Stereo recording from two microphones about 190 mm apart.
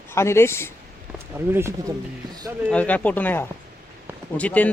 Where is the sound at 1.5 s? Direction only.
15° right (ahead or behind).